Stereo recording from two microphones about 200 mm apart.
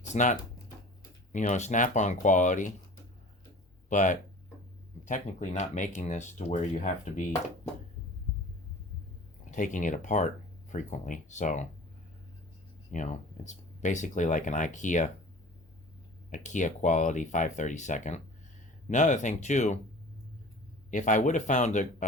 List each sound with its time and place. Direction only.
0.1 s speech: 40° left (ahead or behind)
3.8 s speech: 40° left (ahead or behind)
9.5 s speech: 40° left (ahead or behind)
12.9 s speech: 35° left (ahead or behind)
16.3 s speech: 40° left (ahead or behind)
20.9 s speech: 40° left (ahead or behind)